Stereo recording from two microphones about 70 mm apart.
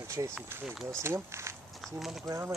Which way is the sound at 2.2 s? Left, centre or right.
Right.